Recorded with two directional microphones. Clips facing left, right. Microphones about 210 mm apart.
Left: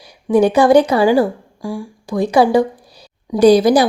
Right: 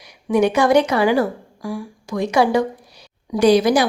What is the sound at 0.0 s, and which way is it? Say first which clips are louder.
A woman's voice: left 4 dB; 30° left (ahead or behind).